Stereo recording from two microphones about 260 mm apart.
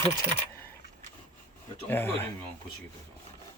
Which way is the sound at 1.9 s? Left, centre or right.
Centre.